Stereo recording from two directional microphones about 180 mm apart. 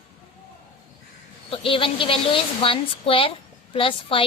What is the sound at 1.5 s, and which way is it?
A woman's voice, 30° left (ahead or behind).